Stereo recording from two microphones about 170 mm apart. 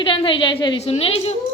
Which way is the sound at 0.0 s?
30° left (ahead or behind).